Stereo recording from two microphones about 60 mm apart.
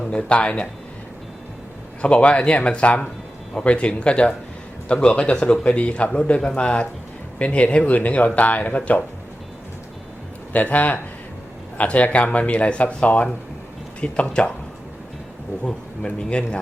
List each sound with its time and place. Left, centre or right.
0.1 s a man's voice: centre
2.0 s a man's voice: centre
10.5 s a man's voice: left
15.6 s a man's voice: centre